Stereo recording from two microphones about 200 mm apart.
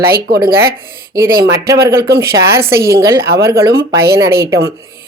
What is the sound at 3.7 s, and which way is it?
Speech, 50° right (ahead or behind).